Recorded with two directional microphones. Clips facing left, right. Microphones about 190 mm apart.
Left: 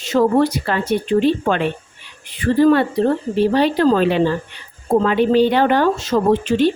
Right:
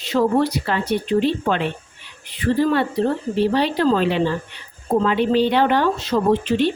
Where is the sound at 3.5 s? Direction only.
50° left (ahead or behind).